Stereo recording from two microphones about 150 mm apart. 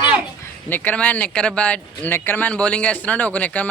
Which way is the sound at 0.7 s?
10° left (ahead or behind).